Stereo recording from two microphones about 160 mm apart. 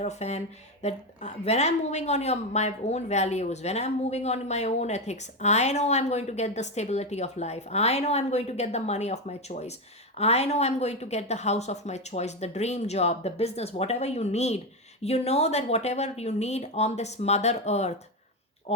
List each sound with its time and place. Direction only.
0.0 s speech: 45° left (ahead or behind)